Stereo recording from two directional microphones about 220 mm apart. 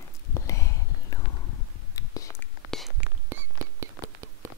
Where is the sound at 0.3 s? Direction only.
15° left (ahead or behind).